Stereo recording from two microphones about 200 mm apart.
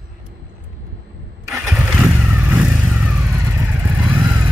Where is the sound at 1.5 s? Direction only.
15° right (ahead or behind).